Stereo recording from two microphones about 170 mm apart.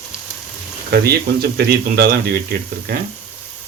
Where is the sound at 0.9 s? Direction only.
65° right (ahead or behind).